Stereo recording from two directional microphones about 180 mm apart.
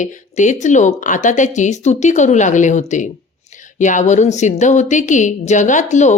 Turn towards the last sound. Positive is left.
turn(degrees=40)  # may be behind; listen again after turning